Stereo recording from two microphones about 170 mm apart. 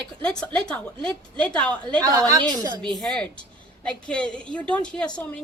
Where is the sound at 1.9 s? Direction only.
25° right (ahead or behind).